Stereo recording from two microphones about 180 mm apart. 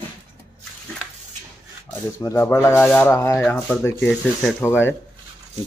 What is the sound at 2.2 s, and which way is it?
Speech, 15° left (ahead or behind).